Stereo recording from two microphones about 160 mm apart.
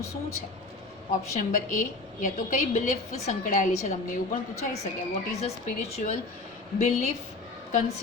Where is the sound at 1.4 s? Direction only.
55° left (ahead or behind).